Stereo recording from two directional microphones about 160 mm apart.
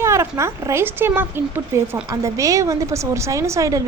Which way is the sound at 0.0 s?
15° right (ahead or behind).